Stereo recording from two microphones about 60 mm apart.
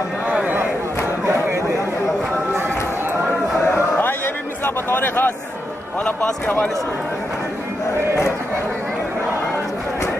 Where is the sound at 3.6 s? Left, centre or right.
Left.